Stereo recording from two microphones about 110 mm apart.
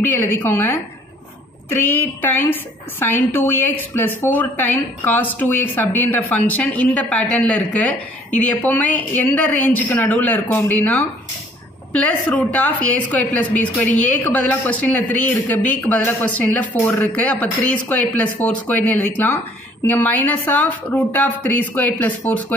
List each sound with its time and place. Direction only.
0.0 s a woman's voice: 15° left (ahead or behind)